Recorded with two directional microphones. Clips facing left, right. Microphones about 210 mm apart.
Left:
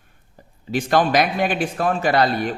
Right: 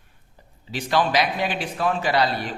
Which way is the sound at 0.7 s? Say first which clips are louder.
Left 4 dB; 50° left (ahead or behind).